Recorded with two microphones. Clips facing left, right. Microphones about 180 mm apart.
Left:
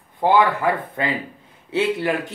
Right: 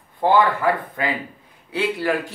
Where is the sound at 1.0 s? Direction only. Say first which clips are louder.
Left 1 dB; 30° left (ahead or behind).